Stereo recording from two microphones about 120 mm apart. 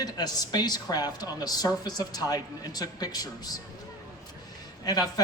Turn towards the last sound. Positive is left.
turn(degrees=35)  # may be behind; listen again after turning